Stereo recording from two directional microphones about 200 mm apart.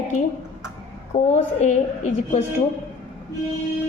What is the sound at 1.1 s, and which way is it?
A woman's voice, 35° left (ahead or behind).